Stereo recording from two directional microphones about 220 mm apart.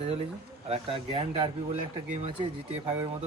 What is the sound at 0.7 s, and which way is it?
Speech, 25° right (ahead or behind).